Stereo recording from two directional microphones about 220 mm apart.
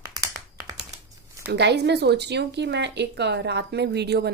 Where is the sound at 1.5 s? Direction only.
50° right (ahead or behind).